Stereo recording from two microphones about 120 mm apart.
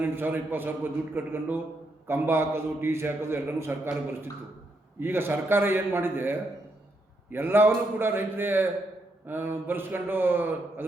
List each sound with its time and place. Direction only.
0.0 s a man's voice: 15° right (ahead or behind)
4.9 s a man's voice: 20° right (ahead or behind)